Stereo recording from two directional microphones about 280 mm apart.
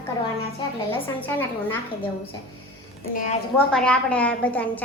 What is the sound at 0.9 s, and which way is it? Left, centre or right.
Speech, centre.